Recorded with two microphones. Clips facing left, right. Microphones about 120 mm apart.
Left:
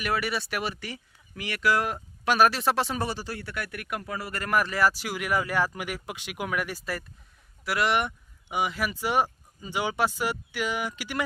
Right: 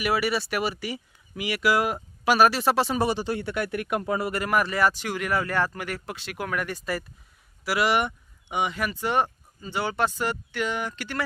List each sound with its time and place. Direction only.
0.0 s speech: 5° right (ahead or behind)
3.0 s speech: 20° right (ahead or behind)
4.4 s speech: 5° right (ahead or behind)